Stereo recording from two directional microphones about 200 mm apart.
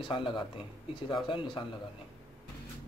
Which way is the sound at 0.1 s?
25° left (ahead or behind).